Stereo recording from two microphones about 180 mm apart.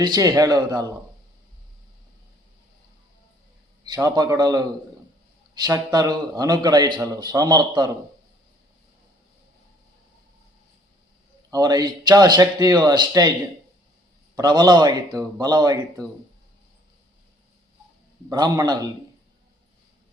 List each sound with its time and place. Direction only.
0.0 s a man's voice: 20° right (ahead or behind)
3.8 s a man's voice: 20° right (ahead or behind)
11.5 s a man's voice: 20° right (ahead or behind)
14.3 s a man's voice: 20° right (ahead or behind)
18.3 s a man's voice: 20° right (ahead or behind)